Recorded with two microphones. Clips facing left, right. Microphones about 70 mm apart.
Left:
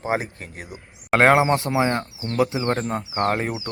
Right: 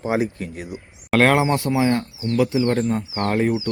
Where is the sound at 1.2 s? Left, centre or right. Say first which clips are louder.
Left 1 dB; left.